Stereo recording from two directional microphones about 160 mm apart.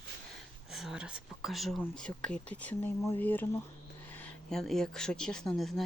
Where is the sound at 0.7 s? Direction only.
Centre (ahead or behind).